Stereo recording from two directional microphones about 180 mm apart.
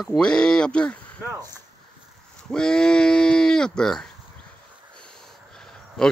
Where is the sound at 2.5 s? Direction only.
5° left (ahead or behind).